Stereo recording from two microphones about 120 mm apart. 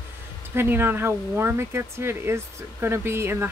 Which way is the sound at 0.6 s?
20° right (ahead or behind).